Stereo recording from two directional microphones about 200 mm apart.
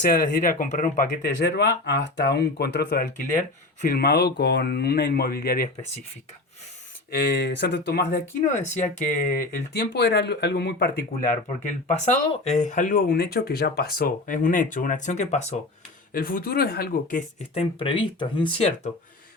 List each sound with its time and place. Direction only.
0.0 s speech: 45° left (ahead or behind)
7.2 s speech: 55° left (ahead or behind)
8.4 s speech: 40° left (ahead or behind)
9.7 s speech: 55° left (ahead or behind)
11.4 s speech: 35° left (ahead or behind)
16.1 s speech: 45° left (ahead or behind)